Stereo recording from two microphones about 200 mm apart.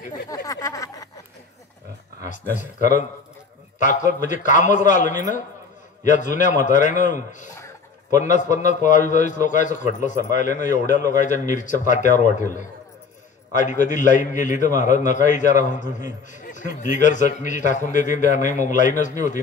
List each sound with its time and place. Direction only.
0.3 s a sound: 15° left (ahead or behind)
2.2 s a man's voice: 40° left (ahead or behind)
13.6 s a man's voice: 40° left (ahead or behind)